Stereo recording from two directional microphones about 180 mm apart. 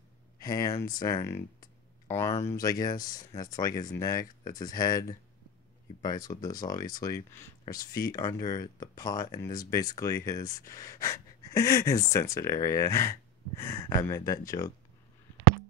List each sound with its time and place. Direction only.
0.4 s speech: 20° left (ahead or behind)